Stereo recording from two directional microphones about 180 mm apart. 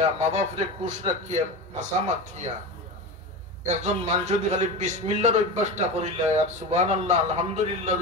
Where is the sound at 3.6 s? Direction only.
40° right (ahead or behind).